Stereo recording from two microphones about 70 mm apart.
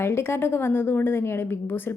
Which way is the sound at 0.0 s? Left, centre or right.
Left.